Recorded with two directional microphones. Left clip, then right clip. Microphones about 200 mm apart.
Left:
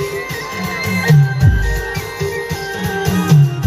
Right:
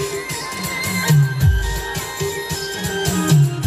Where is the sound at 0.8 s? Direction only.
25° right (ahead or behind).